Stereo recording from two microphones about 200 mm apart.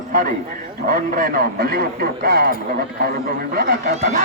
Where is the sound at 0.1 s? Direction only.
45° right (ahead or behind).